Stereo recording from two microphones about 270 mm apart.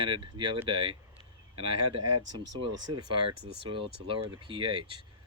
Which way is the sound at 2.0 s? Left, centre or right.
Right.